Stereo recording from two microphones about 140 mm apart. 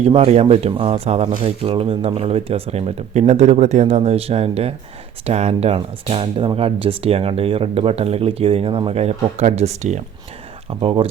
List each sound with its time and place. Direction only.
0.0 s speech: 50° right (ahead or behind)
10.8 s speech: 40° right (ahead or behind)